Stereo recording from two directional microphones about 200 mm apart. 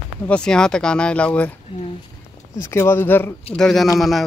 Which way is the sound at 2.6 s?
15° left (ahead or behind).